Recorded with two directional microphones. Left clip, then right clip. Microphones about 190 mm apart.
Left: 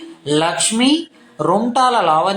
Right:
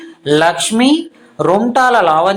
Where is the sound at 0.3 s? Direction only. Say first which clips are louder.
Right 5 dB; 10° right (ahead or behind).